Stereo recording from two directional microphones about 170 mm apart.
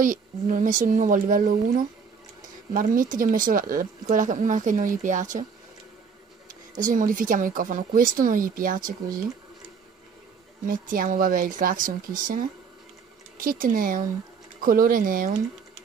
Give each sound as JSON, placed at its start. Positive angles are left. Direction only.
{"t": 0.0, "sound": "speech", "side_deg": -50}
{"t": 6.7, "sound": "speech", "side_deg": -50}
{"t": 10.7, "sound": "speech", "side_deg": -55}